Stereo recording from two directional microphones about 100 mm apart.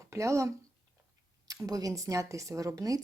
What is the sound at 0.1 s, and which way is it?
Speech, 30° right (ahead or behind).